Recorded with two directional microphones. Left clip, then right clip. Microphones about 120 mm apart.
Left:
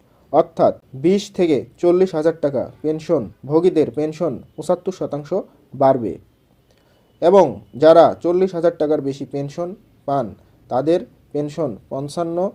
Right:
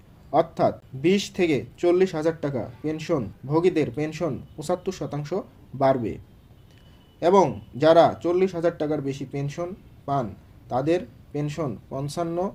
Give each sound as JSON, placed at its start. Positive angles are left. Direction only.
{"t": 0.3, "sound": "speech", "side_deg": 25}
{"t": 7.2, "sound": "speech", "side_deg": 25}